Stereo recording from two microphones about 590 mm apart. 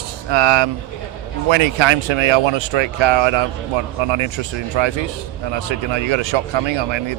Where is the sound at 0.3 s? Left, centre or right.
Right.